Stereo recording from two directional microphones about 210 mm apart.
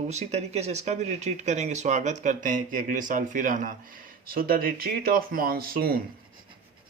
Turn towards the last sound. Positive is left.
turn(degrees=-45)  # may be behind; listen again after turning